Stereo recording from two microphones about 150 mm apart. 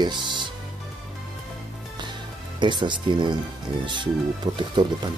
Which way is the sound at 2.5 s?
30° right (ahead or behind).